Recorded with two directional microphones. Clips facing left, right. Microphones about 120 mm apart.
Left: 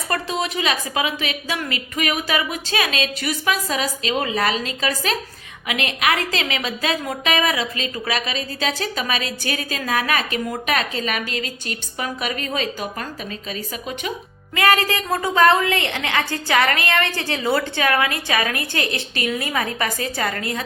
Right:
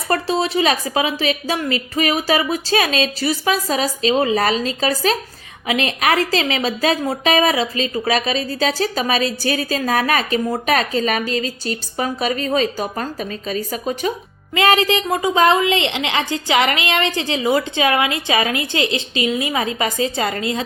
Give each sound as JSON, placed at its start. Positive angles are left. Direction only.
{"t": 0.1, "sound": "a woman's voice", "side_deg": -35}
{"t": 14.5, "sound": "a woman's voice", "side_deg": -20}